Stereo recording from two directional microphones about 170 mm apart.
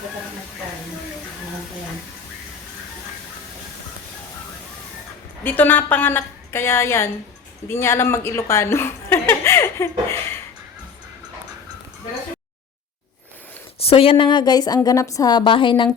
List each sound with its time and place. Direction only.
5.4 s a woman's voice: 10° left (ahead or behind)
13.7 s a woman's voice: 35° left (ahead or behind)